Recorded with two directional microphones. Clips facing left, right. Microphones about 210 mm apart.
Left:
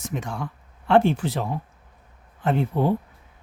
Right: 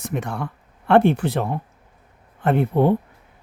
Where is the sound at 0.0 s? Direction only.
60° right (ahead or behind).